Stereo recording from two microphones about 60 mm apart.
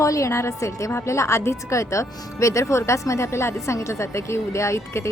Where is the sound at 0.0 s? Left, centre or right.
Left.